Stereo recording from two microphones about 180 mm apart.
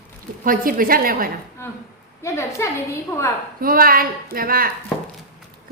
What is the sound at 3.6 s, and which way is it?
A woman's voice, 55° right (ahead or behind).